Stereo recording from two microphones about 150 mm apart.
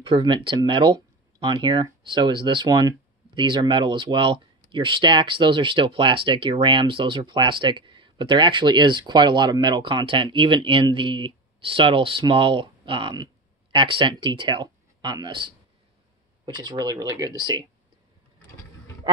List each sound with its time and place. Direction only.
0.0 s speech: 35° right (ahead or behind)